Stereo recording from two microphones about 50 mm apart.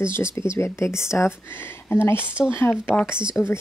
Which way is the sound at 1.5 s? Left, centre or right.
Left.